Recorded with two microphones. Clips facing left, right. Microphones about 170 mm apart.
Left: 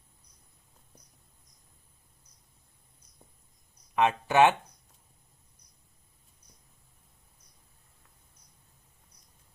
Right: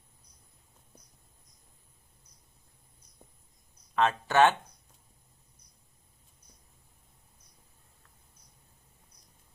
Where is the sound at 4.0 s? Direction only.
15° left (ahead or behind).